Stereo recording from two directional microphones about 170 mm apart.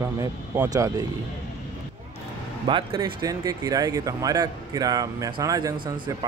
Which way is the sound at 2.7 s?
30° right (ahead or behind).